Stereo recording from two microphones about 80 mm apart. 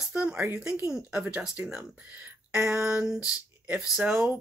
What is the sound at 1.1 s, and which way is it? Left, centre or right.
Speech, right.